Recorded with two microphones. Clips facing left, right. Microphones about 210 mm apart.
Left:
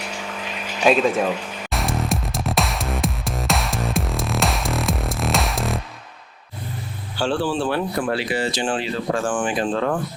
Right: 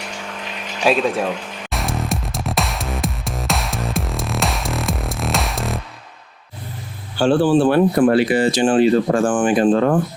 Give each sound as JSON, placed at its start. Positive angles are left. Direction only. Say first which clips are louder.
{"t": 0.0, "sound": "music", "louder": "even", "side_deg": 5}
{"t": 7.2, "sound": "speech", "louder": "right 8 dB", "side_deg": -50}